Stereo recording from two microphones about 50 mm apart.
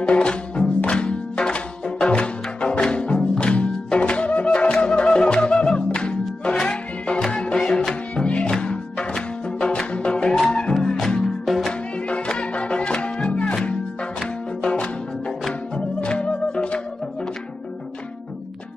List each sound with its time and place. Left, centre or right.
0.0 s music: centre
11.4 s music: centre
12.1 s music: left
14.6 s music: left